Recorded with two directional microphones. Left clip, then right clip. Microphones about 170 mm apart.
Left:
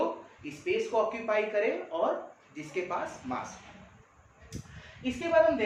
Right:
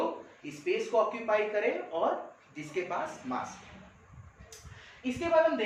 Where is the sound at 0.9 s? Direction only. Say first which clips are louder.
Right 3 dB; 25° left (ahead or behind).